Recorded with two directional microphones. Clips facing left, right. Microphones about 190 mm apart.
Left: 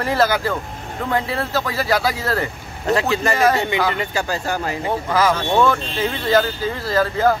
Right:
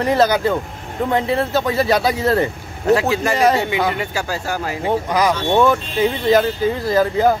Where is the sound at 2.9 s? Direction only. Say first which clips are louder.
Right 3 dB; 10° right (ahead or behind).